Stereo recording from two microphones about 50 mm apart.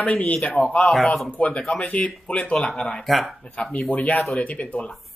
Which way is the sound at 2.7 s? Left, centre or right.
Centre.